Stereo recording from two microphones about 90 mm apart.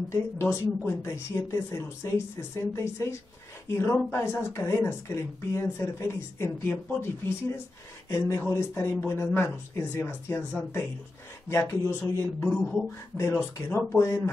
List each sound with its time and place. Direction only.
0.1 s speech: 30° left (ahead or behind)